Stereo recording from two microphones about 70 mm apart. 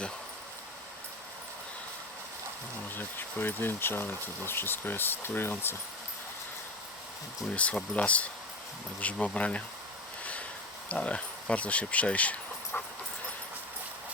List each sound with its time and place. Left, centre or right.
2.9 s speech: left
7.5 s speech: centre
10.8 s speech: centre